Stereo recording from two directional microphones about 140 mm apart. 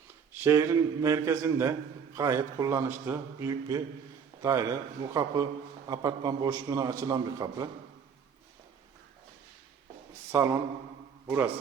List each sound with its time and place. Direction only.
0.4 s a man's voice: 20° right (ahead or behind)
10.3 s a man's voice: 20° right (ahead or behind)